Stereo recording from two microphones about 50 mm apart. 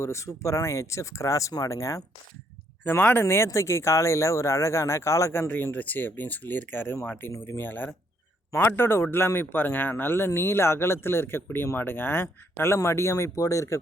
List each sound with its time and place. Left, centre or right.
0.0 s speech: left
2.8 s speech: left
5.7 s speech: left
7.3 s a man's voice: left